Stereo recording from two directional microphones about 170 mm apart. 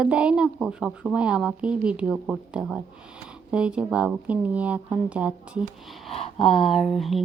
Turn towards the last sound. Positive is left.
turn(degrees=0)  # may be behind; listen again after turning